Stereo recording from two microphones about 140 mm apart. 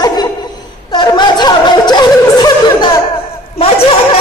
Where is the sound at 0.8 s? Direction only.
30° left (ahead or behind).